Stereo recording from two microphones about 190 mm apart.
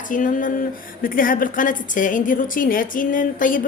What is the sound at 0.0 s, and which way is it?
Speech, 45° left (ahead or behind).